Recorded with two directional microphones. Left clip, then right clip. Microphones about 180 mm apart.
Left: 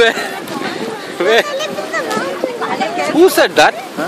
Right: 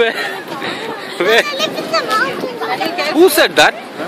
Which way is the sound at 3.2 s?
Centre (ahead or behind).